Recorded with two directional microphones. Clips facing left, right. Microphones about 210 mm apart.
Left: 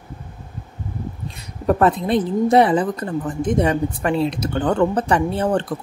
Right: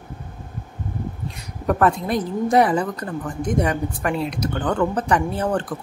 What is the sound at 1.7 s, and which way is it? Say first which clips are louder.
Speech: left 3 dB; 25° left (ahead or behind).